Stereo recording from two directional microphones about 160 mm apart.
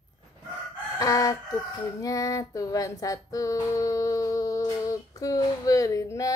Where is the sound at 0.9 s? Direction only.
20° left (ahead or behind).